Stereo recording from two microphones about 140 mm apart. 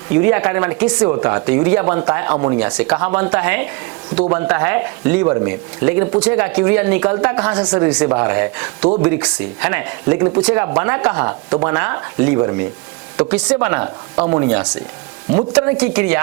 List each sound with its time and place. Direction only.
0.1 s speech: 15° right (ahead or behind)